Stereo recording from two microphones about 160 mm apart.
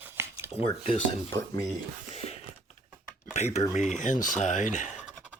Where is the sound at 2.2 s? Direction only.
40° left (ahead or behind).